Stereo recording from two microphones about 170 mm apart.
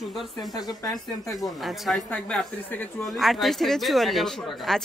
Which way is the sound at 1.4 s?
Centre (ahead or behind).